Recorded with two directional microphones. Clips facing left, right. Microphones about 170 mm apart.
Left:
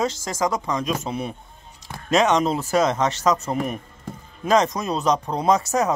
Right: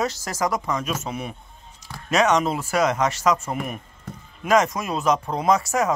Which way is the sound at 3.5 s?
35° left (ahead or behind).